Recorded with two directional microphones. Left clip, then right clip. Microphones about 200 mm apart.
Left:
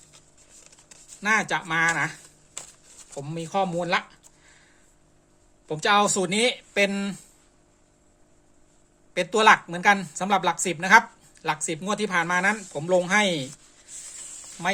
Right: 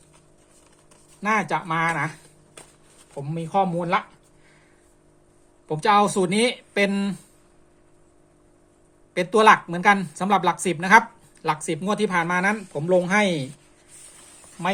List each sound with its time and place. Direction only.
1.2 s speech: 10° left (ahead or behind)
3.2 s speech: 15° left (ahead or behind)
5.6 s speech: 5° left (ahead or behind)
9.1 s speech: centre (ahead or behind)